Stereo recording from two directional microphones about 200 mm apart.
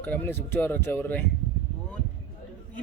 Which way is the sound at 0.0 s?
10° left (ahead or behind).